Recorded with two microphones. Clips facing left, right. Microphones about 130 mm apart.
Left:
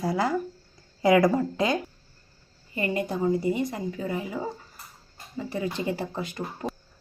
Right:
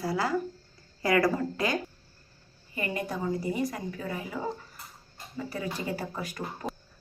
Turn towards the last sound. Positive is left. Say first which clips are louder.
# left 3 dB
turn(degrees=25)  # may be behind; listen again after turning